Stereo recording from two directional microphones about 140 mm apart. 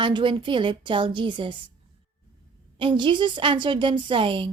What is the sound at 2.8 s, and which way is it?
A woman's voice, 35° right (ahead or behind).